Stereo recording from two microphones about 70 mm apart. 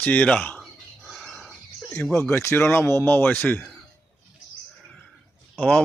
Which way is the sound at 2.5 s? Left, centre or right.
Left.